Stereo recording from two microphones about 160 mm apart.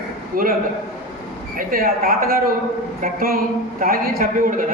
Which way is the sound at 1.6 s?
65° right (ahead or behind).